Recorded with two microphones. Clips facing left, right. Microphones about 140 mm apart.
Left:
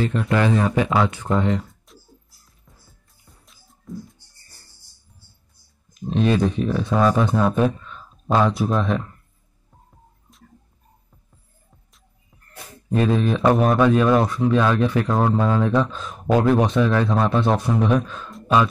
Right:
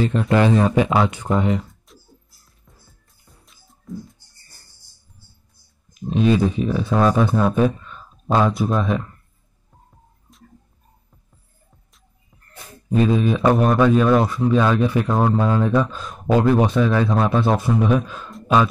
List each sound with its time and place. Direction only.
0.0 s speech: 25° right (ahead or behind); by 2.0 s centre (ahead or behind)
3.4 s music: centre (ahead or behind)
5.9 s speech: 5° right (ahead or behind)
13.1 s speech: 5° right (ahead or behind)